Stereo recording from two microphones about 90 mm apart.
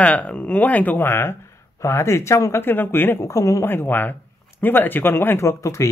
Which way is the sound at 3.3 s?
35° left (ahead or behind).